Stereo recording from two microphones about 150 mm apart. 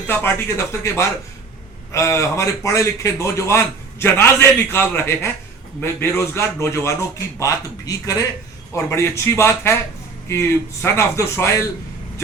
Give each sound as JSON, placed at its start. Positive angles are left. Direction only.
{"t": 0.1, "sound": "a man's voice", "side_deg": 15}
{"t": 10.8, "sound": "a man's voice", "side_deg": 15}